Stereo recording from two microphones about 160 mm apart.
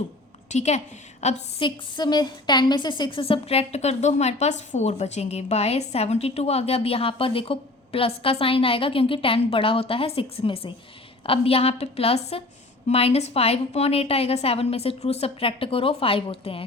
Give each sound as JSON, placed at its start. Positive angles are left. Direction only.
{"t": 0.5, "sound": "a woman's voice", "side_deg": 45}
{"t": 1.6, "sound": "a woman's voice", "side_deg": 30}